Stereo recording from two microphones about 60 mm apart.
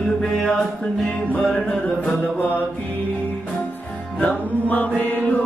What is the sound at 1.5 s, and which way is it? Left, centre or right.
Music, centre.